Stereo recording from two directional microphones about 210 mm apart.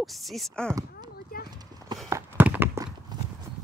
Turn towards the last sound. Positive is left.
turn(degrees=-10)  # may be behind; listen again after turning